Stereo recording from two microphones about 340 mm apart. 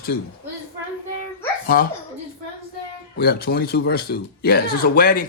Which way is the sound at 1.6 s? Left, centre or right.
Left.